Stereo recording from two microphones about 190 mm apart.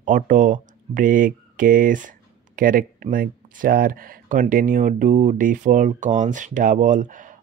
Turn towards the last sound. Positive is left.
turn(degrees=-45)  # may be behind; listen again after turning